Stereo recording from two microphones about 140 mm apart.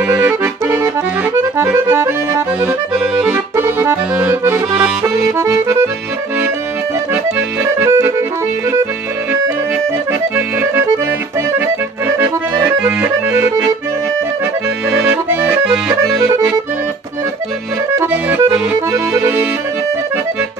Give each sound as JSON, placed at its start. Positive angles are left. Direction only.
{"t": 0.1, "sound": "accordion", "side_deg": -15}
{"t": 3.3, "sound": "accordion", "side_deg": -20}
{"t": 5.1, "sound": "accordion", "side_deg": -25}
{"t": 7.6, "sound": "accordion", "side_deg": -20}
{"t": 10.3, "sound": "accordion", "side_deg": -15}
{"t": 12.6, "sound": "accordion", "side_deg": -10}
{"t": 14.9, "sound": "accordion", "side_deg": -15}
{"t": 15.9, "sound": "accordion", "side_deg": -25}
{"t": 18.1, "sound": "accordion", "side_deg": -15}